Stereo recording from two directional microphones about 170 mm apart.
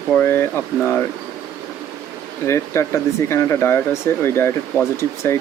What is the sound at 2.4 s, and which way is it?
Speech, 15° left (ahead or behind).